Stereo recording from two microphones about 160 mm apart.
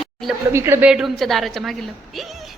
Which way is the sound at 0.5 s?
15° right (ahead or behind).